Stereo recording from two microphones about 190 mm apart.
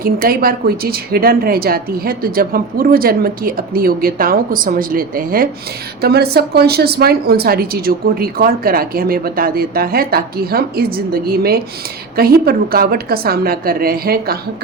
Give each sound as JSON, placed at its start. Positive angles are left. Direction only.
{"t": 0.0, "sound": "a woman's voice", "side_deg": -50}